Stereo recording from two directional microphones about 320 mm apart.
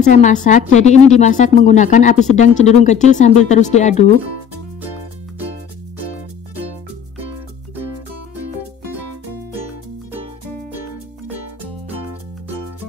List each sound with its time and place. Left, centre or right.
0.0 s speech: left